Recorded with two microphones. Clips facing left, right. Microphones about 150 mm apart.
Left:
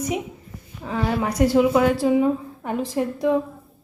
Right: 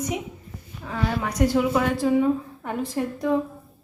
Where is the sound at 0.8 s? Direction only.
15° left (ahead or behind).